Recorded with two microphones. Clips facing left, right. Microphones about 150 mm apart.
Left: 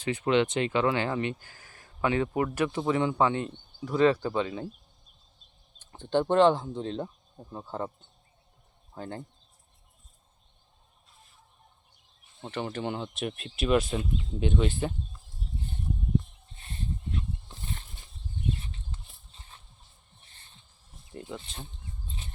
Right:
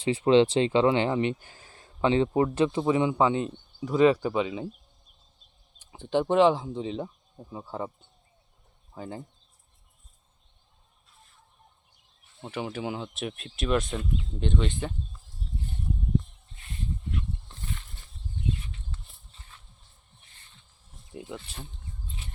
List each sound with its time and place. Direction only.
0.0 s speech: 30° right (ahead or behind); by 4.7 s 5° right (ahead or behind)
5.8 s speech: 5° right (ahead or behind)
9.0 s speech: 5° right (ahead or behind)
12.4 s speech: 10° right (ahead or behind)
16.6 s a sound: 35° left (ahead or behind)
19.3 s a sound: 25° left (ahead or behind)
21.1 s speech: 5° right (ahead or behind)